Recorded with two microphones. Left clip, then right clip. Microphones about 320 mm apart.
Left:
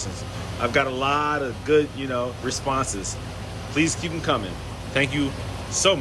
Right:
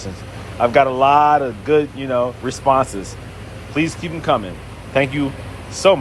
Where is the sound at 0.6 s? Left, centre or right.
Centre.